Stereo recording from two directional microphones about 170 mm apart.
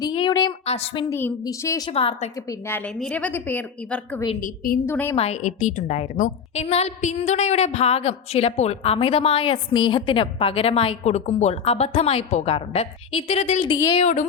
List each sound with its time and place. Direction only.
0.0 s a sound: 25° left (ahead or behind)
0.6 s a woman's voice: 35° left (ahead or behind)
1.1 s a woman's voice: 15° left (ahead or behind)
1.9 s a woman's voice: 35° left (ahead or behind)
2.5 s a woman's voice: 15° left (ahead or behind)
4.4 s a woman's voice: 55° left (ahead or behind)
4.9 s a woman's voice: 15° left (ahead or behind)
5.1 s a woman's voice: 40° left (ahead or behind); by 13.9 s 25° left (ahead or behind)
14.0 s a sound: 45° left (ahead or behind)